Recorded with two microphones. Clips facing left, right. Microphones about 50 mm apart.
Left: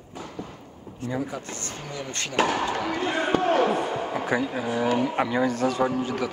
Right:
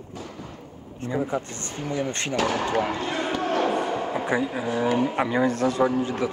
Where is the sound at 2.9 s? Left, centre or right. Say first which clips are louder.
Left 1 dB; left.